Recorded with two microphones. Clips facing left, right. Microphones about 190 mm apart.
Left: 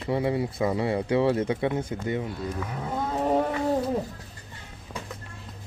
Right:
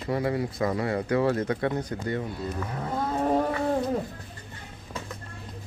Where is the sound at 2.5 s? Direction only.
Centre (ahead or behind).